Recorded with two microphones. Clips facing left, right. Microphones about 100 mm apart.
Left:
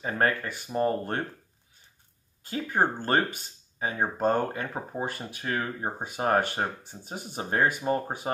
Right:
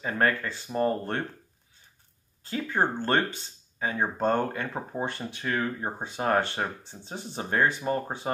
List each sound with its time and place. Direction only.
0.0 s speech: 20° left (ahead or behind)
2.4 s speech: 15° left (ahead or behind)